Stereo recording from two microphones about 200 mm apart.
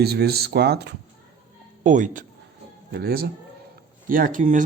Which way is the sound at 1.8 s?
40° right (ahead or behind).